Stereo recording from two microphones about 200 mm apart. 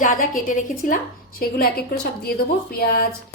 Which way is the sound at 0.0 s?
40° left (ahead or behind).